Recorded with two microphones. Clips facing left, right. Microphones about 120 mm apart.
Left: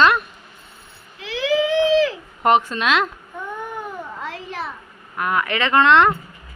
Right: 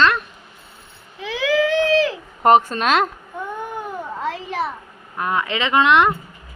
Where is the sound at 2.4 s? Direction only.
40° right (ahead or behind).